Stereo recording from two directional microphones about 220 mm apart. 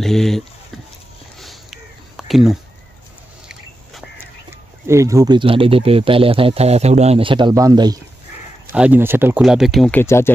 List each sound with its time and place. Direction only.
0.0 s speech: centre (ahead or behind)
1.4 s a sound: centre (ahead or behind)
4.8 s speech: 15° right (ahead or behind)
8.7 s speech: 5° right (ahead or behind); by 10.3 s 10° left (ahead or behind)